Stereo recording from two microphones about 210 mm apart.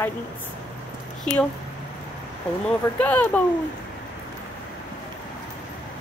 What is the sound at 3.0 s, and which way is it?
Speech, 5° left (ahead or behind).